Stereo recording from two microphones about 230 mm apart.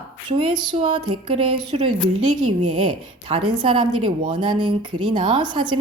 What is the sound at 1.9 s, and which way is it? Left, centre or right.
Speech, right.